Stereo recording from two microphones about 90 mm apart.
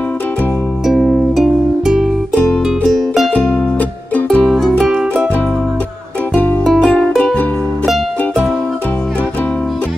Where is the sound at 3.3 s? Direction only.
15° left (ahead or behind).